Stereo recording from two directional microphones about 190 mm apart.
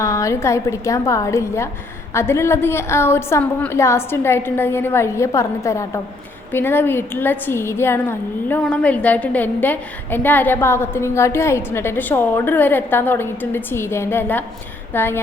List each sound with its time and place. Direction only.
0.0 s a woman's voice: 15° left (ahead or behind)